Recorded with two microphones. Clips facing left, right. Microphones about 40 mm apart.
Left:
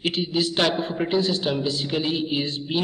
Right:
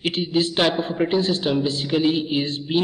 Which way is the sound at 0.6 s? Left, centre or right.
Centre.